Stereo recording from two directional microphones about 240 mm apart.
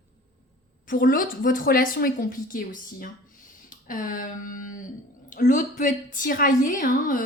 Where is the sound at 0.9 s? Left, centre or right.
Left.